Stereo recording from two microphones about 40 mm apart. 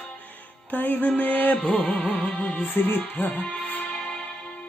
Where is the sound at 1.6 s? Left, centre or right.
Left.